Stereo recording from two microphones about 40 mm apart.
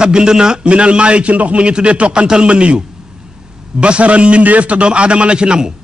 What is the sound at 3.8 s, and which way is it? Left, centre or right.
A man's voice, right.